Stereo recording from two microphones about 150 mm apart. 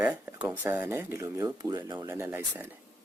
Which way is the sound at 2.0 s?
15° right (ahead or behind).